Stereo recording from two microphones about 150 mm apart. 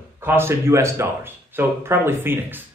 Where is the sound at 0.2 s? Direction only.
15° right (ahead or behind).